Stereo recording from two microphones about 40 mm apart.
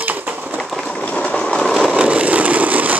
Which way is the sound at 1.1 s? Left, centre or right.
Left.